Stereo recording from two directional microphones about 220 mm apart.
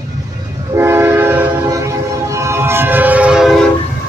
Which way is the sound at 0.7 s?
10° right (ahead or behind).